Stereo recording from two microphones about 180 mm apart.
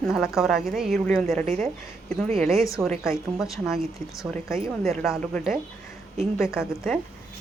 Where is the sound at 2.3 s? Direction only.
Centre (ahead or behind).